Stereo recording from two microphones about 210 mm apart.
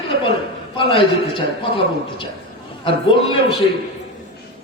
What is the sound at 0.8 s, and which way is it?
A man's voice, 25° left (ahead or behind).